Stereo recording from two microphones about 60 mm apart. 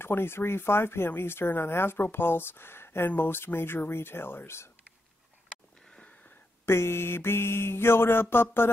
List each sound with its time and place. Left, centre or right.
0.0 s speech: left
5.9 s wheeze: centre
6.6 s speech: left